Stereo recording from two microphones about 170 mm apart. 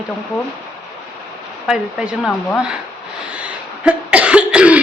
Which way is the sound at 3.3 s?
5° right (ahead or behind).